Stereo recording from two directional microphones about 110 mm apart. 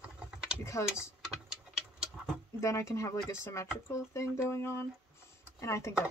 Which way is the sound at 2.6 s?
25° left (ahead or behind).